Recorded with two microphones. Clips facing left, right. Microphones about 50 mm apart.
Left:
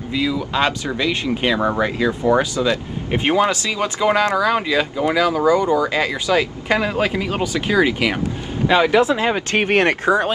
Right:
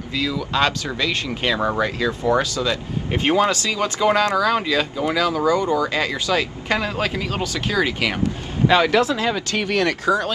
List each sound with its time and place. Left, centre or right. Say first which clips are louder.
0.1 s speech: left 2 dB; centre